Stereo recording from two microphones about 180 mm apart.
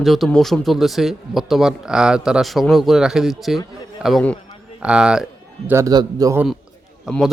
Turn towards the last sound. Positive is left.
turn(degrees=0)  # may be behind; listen again after turning